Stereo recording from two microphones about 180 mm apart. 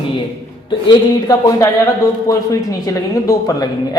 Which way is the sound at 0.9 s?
20° left (ahead or behind).